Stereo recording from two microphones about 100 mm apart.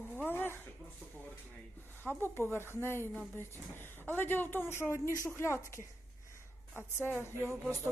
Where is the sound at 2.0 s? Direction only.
25° left (ahead or behind).